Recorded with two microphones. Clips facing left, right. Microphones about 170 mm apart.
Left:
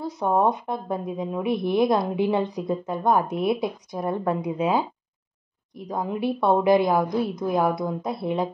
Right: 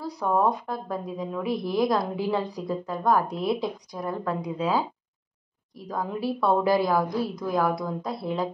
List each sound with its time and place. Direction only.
0.0 s a woman's voice: 20° left (ahead or behind)